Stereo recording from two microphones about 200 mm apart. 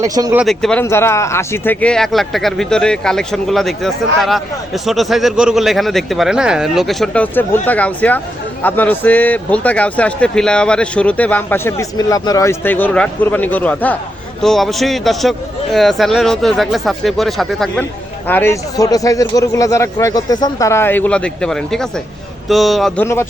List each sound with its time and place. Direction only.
0.0 s speech: 15° right (ahead or behind)
0.3 s a man's voice: centre (ahead or behind)